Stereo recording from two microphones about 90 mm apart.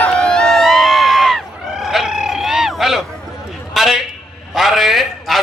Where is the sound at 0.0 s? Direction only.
10° left (ahead or behind).